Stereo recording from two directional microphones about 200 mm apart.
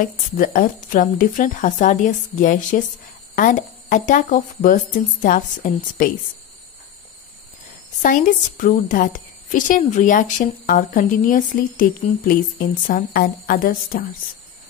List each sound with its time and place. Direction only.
0.0 s a woman's voice: 45° left (ahead or behind)
8.0 s a woman's voice: 40° left (ahead or behind)